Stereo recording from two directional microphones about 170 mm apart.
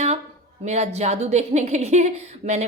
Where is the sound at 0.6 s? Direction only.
40° right (ahead or behind).